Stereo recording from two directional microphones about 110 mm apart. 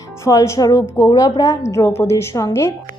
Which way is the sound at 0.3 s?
30° left (ahead or behind).